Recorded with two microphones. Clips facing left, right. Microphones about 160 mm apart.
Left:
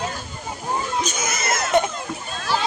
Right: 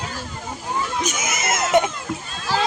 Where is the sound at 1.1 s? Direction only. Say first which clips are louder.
Even; 20° right (ahead or behind).